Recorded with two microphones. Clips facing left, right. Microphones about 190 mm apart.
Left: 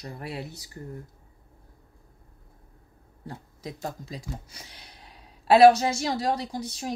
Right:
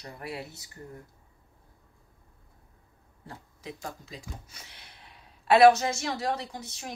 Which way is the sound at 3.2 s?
35° left (ahead or behind).